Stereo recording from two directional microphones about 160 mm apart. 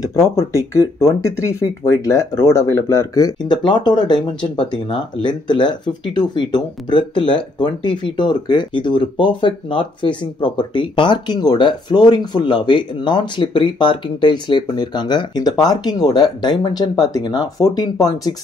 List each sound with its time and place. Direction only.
0.4 s speech: 20° left (ahead or behind)